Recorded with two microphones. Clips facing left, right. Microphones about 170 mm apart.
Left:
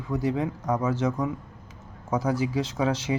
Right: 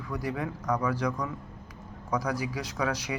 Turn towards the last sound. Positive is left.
turn(degrees=25)  # may be behind; listen again after turning